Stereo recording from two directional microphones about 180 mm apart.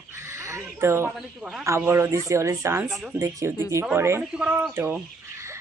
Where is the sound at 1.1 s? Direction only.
Centre (ahead or behind).